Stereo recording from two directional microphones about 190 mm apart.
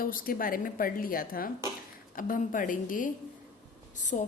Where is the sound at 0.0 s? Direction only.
50° left (ahead or behind).